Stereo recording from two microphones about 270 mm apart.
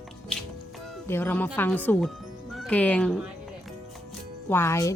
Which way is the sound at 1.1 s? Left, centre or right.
Centre.